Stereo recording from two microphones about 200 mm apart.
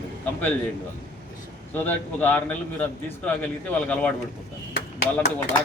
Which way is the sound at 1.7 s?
10° left (ahead or behind).